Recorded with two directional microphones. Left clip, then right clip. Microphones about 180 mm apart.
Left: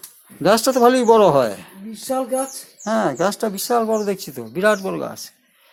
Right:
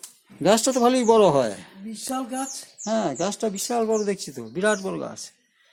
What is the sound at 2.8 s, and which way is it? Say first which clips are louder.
Speech: left 6 dB; centre (ahead or behind).